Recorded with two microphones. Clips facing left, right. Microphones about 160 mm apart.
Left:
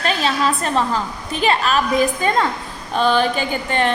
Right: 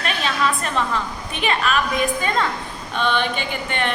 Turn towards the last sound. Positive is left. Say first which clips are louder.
# left 5 dB
turn(degrees=35)  # may be behind; listen again after turning